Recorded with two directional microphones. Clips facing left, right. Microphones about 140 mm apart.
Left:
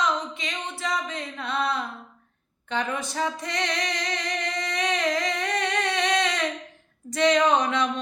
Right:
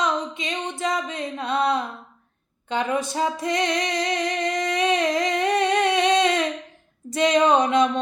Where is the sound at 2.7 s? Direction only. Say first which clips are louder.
Right 5 dB; 20° right (ahead or behind).